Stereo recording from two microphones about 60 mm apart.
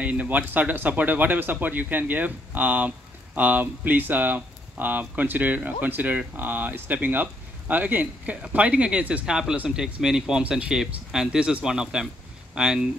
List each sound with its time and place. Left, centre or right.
0.0 s speech: right
9.2 s speech: centre